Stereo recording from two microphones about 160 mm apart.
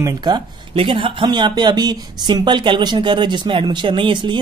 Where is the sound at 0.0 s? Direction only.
25° right (ahead or behind).